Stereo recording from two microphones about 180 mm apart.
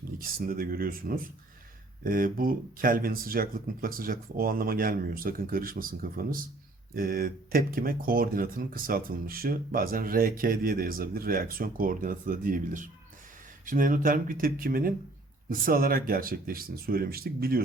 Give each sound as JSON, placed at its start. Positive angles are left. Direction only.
{"t": 0.2, "sound": "speech", "side_deg": -55}